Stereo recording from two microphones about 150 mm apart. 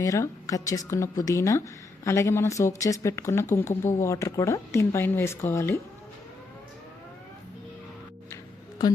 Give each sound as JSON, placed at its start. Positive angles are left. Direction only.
{"t": 0.0, "sound": "a woman's voice", "side_deg": 20}